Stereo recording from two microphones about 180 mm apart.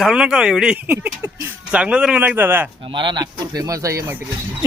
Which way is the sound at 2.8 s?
25° right (ahead or behind).